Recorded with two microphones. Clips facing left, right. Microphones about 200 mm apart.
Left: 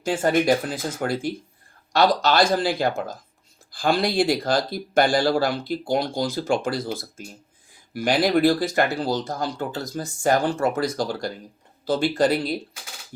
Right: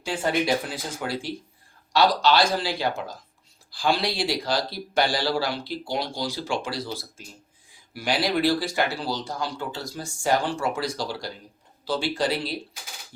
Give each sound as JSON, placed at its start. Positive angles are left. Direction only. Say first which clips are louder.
{"t": 0.0, "sound": "speech", "louder": "left 5 dB", "side_deg": 45}